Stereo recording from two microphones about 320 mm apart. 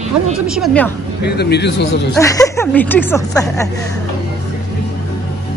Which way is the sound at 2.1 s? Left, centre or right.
Centre.